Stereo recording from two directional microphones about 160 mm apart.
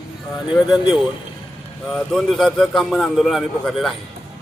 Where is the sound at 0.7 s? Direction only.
Centre (ahead or behind).